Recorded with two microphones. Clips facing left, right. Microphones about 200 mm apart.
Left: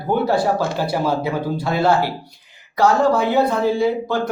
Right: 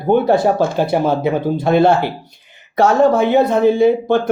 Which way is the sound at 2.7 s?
25° right (ahead or behind).